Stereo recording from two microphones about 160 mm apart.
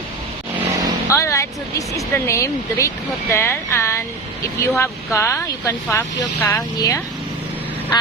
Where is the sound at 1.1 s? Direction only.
20° left (ahead or behind).